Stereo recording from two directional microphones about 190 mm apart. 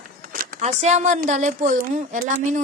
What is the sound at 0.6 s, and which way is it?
A woman's voice, 35° right (ahead or behind).